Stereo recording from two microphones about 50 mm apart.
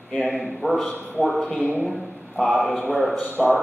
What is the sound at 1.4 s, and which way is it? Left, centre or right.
Speech, centre.